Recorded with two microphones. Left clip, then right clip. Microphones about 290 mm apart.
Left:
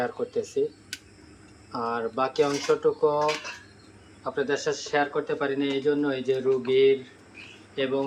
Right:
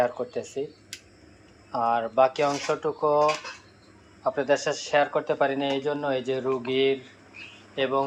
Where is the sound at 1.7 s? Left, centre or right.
Centre.